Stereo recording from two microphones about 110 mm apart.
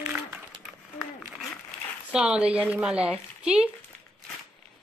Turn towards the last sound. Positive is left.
turn(degrees=-10)  # may be behind; listen again after turning